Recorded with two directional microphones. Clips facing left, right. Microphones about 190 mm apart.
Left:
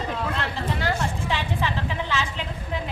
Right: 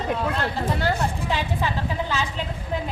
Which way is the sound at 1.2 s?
40° right (ahead or behind).